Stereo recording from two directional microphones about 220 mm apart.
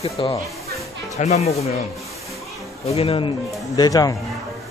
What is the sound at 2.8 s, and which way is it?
Speech, 25° left (ahead or behind).